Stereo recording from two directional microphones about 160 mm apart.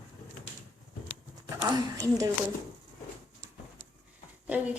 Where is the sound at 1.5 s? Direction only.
25° right (ahead or behind).